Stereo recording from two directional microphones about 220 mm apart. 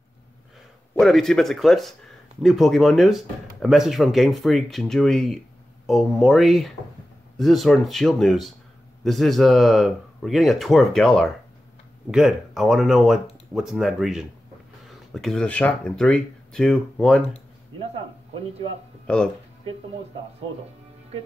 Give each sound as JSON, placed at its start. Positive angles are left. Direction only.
{"t": 0.9, "sound": "speech", "side_deg": 0}
{"t": 19.1, "sound": "speech", "side_deg": 5}